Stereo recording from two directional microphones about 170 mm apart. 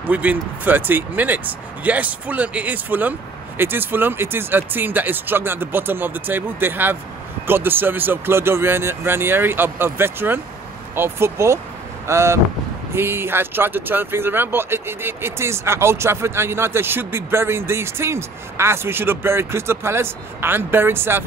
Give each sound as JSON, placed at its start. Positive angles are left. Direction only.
{"t": 0.0, "sound": "speech", "side_deg": -10}